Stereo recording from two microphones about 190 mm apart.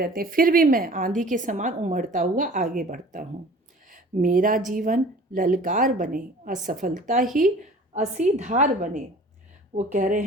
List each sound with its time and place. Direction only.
0.0 s a woman's voice: 50° right (ahead or behind)